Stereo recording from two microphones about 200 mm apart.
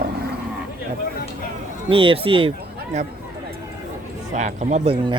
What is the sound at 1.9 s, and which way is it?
Speech, 25° right (ahead or behind).